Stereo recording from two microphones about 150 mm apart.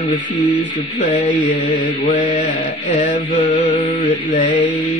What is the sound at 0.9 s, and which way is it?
Music, 60° left (ahead or behind).